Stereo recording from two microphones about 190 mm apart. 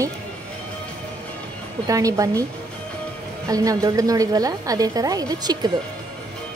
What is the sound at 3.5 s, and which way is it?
A woman's voice, 20° right (ahead or behind).